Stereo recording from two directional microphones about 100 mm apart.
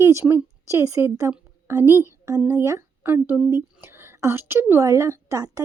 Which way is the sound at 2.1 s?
35° right (ahead or behind).